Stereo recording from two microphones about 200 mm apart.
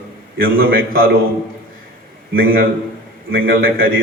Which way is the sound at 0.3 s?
45° right (ahead or behind).